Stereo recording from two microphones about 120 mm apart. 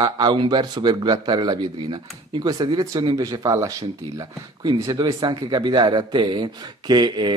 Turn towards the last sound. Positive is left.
turn(degrees=-35)  # may be behind; listen again after turning